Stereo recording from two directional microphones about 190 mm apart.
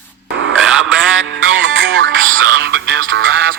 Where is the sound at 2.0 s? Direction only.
75° right (ahead or behind).